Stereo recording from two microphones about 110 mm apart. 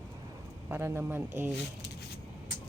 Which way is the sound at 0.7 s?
20° right (ahead or behind).